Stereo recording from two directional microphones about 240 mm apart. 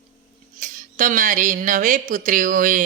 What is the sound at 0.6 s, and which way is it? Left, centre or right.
Speech, right.